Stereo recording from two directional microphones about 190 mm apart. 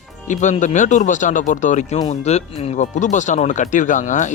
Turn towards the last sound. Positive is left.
turn(degrees=40)  # may be behind; listen again after turning